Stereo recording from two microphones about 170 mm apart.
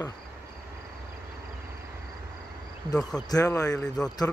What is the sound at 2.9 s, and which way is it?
Speech, 20° left (ahead or behind).